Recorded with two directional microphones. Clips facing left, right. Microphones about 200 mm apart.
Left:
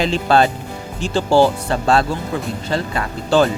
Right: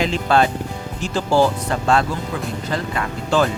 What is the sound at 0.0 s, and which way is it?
Speech, 35° left (ahead or behind).